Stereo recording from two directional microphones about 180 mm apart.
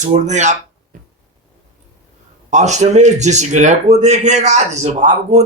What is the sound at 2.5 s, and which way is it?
Speech, 40° right (ahead or behind).